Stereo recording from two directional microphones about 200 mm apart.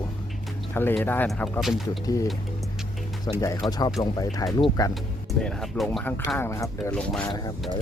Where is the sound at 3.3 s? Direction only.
20° left (ahead or behind).